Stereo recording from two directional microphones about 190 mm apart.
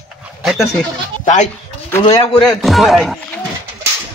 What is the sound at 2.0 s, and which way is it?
Speech, 30° left (ahead or behind).